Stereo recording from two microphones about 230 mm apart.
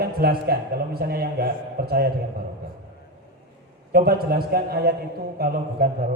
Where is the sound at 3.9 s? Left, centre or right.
Right.